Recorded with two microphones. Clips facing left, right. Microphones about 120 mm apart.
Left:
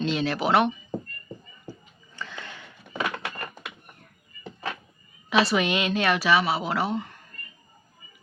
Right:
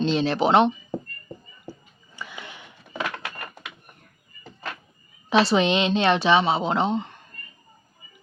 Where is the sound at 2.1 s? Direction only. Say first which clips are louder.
Even; 15° right (ahead or behind).